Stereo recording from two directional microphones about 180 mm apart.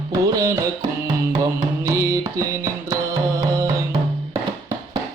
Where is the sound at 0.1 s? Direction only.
20° right (ahead or behind).